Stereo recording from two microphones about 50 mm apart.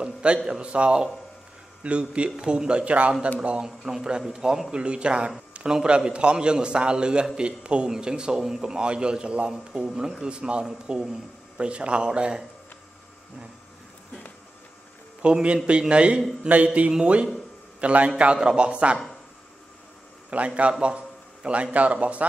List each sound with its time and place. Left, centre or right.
0.0 s a man's voice: right
15.2 s speech: centre
20.2 s speech: right
20.8 s a sound: right
21.7 s speech: right